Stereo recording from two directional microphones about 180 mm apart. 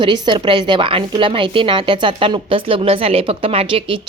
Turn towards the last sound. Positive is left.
turn(degrees=-30)  # may be behind; listen again after turning